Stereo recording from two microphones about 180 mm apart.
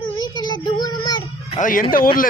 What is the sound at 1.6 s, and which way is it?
Speech, 50° left (ahead or behind).